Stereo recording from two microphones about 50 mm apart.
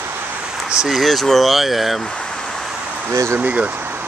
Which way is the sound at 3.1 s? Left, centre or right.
Right.